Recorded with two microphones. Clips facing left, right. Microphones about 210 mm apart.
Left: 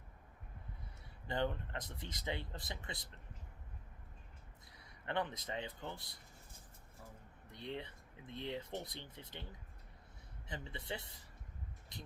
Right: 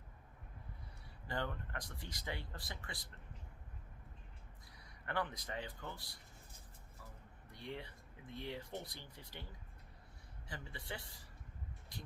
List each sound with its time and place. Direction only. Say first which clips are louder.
1.3 s speech: left 4 dB; 20° left (ahead or behind)
5.0 s speech: left 2 dB; 20° left (ahead or behind)
7.5 s speech: left 2 dB; 20° left (ahead or behind)
10.5 s speech: left 3 dB; 20° left (ahead or behind)